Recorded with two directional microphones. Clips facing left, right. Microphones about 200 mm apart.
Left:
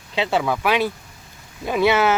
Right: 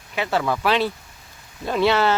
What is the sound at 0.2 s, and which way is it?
Speech, 20° left (ahead or behind).